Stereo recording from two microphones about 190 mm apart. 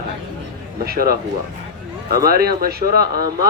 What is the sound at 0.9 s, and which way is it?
Speech, 55° right (ahead or behind).